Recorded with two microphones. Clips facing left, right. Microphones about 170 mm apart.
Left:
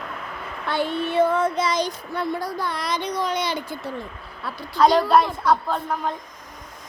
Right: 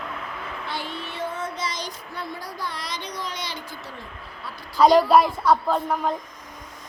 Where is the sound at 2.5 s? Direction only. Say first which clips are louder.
Left 6 dB; 55° left (ahead or behind).